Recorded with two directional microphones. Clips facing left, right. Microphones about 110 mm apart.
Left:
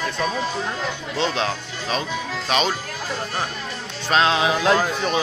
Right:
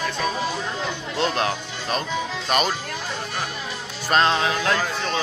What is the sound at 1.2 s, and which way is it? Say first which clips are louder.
Speech: even; 5° right (ahead or behind).